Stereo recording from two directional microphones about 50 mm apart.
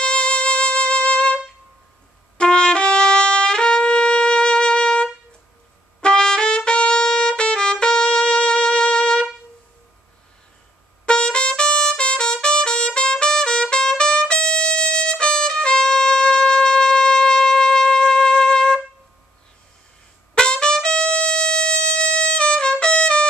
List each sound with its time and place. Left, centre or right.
0.0 s music: centre
2.3 s trumpet: centre
11.1 s trumpet: centre
20.3 s trumpet: centre